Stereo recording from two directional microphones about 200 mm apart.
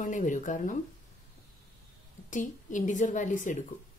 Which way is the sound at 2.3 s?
40° left (ahead or behind).